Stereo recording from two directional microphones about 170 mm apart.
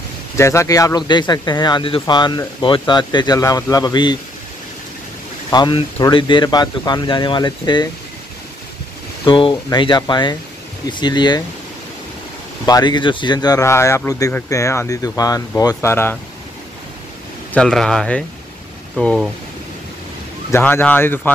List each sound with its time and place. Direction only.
0.4 s speech: 15° left (ahead or behind)
5.5 s speech: 25° left (ahead or behind)
9.2 s speech: 30° left (ahead or behind)
12.6 s speech: 25° left (ahead or behind)
17.6 s speech: 5° left (ahead or behind)
20.5 s speech: 10° left (ahead or behind)